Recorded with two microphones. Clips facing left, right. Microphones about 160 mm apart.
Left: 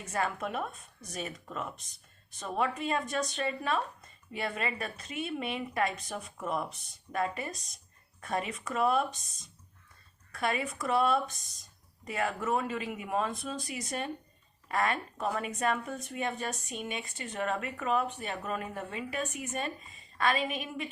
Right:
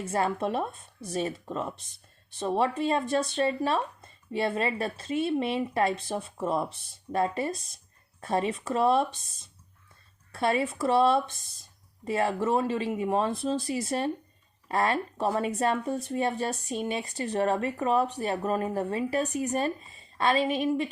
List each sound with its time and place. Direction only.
0.0 s speech: 30° right (ahead or behind)